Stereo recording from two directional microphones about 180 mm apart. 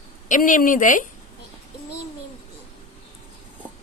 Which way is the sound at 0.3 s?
45° left (ahead or behind).